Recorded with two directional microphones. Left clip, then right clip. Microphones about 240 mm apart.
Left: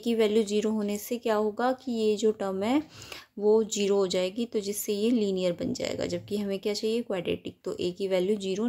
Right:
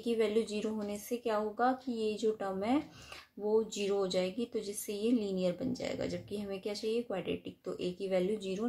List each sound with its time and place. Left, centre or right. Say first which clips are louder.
0.0 s speech: left 6 dB; left